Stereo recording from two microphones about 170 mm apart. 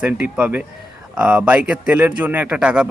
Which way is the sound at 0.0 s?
5° right (ahead or behind).